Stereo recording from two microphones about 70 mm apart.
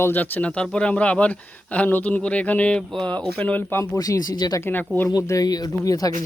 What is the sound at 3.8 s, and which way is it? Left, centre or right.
Speech, left.